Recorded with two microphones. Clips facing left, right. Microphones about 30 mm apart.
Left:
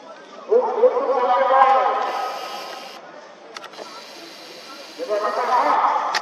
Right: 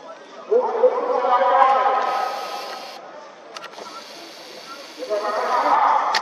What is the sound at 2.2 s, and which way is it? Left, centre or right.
Music, right.